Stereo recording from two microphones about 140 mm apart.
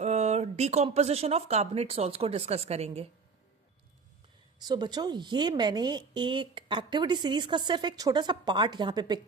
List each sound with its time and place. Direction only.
0.0 s speech: 55° right (ahead or behind)
4.6 s a woman's voice: 30° right (ahead or behind)